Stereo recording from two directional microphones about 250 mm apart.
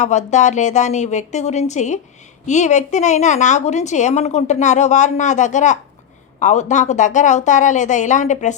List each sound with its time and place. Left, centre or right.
0.0 s a woman's voice: left